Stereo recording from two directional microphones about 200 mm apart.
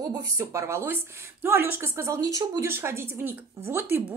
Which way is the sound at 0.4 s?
15° right (ahead or behind).